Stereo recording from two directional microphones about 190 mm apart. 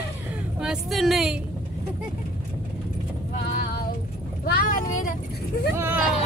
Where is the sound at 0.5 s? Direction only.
Centre (ahead or behind).